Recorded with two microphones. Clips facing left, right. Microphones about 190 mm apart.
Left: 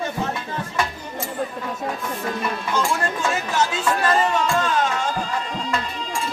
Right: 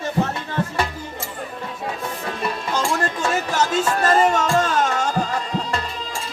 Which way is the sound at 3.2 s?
40° right (ahead or behind).